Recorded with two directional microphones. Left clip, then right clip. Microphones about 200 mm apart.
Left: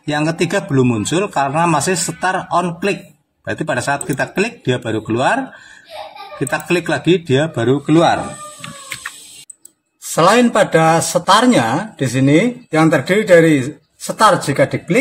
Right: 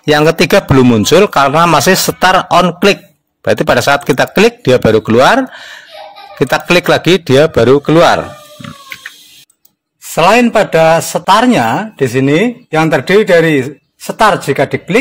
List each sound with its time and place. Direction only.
0.0 s a man's voice: 55° right (ahead or behind)
6.5 s a man's voice: 50° right (ahead or behind)
10.1 s speech: 25° right (ahead or behind)